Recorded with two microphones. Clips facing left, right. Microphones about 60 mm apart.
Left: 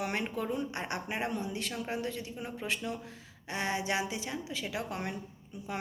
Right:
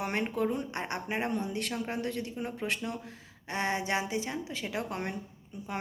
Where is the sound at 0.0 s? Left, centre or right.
Right.